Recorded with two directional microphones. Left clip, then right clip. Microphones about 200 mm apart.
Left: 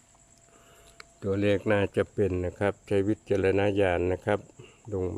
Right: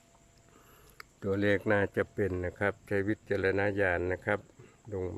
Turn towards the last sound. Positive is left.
turn(degrees=10)  # may be behind; listen again after turning